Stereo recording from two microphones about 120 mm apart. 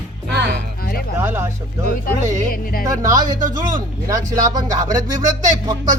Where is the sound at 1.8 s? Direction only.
90° right.